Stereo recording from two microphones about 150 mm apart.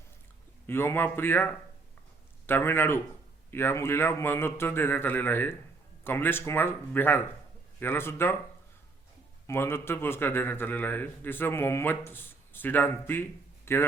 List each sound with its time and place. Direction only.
0.7 s a man's voice: 15° left (ahead or behind)
2.5 s a man's voice: 15° left (ahead or behind)
9.5 s a man's voice: 15° left (ahead or behind)